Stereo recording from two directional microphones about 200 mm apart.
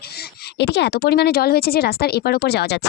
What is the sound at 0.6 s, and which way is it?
Speech, 55° left (ahead or behind).